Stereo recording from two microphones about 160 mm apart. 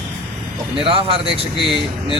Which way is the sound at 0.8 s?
35° right (ahead or behind).